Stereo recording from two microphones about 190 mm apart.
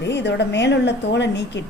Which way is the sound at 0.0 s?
65° left (ahead or behind).